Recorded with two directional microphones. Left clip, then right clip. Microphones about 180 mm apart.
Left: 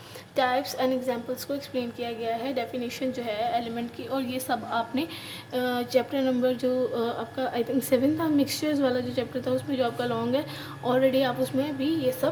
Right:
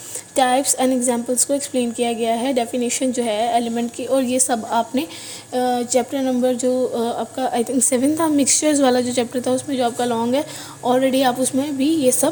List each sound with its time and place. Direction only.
0.3 s a woman's voice: 40° right (ahead or behind)